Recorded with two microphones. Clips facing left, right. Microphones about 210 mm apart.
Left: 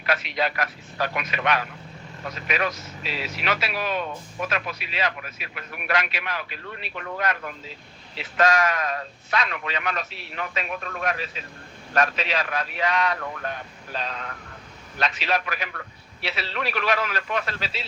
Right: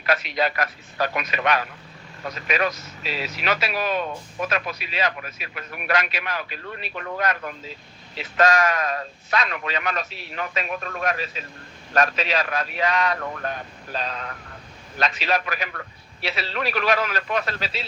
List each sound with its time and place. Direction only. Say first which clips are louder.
0.0 s speech: right 2 dB; 40° right (ahead or behind)